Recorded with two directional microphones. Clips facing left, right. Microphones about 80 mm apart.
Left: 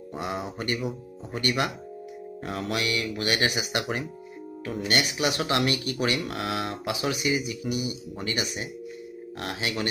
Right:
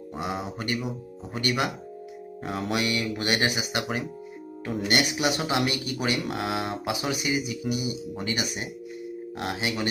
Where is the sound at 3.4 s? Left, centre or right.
Centre.